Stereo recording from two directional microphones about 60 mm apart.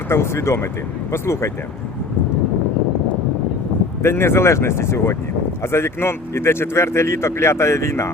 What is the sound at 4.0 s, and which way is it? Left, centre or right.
Speech, left.